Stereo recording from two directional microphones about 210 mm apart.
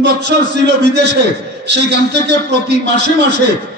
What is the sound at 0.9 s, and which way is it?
Speech, 55° right (ahead or behind).